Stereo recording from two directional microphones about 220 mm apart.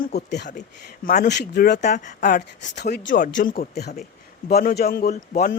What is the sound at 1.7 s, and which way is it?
A woman's voice, 35° left (ahead or behind).